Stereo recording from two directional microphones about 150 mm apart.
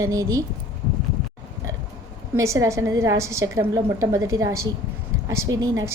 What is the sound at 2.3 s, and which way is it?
A woman's voice, 20° right (ahead or behind).